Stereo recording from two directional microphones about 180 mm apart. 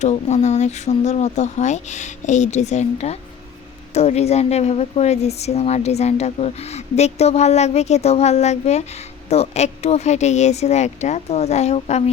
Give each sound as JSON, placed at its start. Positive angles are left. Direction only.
{"t": 0.0, "sound": "a woman's voice", "side_deg": 40}